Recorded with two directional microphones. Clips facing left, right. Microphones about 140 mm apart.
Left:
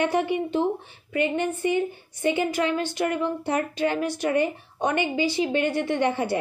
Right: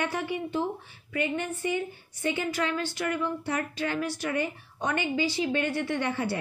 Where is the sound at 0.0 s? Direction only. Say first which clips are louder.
Left 7 dB; 20° left (ahead or behind).